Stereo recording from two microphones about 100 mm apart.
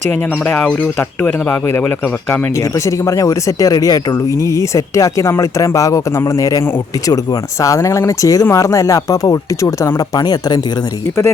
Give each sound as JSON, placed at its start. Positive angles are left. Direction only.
{"t": 3.1, "sound": "speech", "side_deg": 35}
{"t": 7.6, "sound": "speech", "side_deg": 30}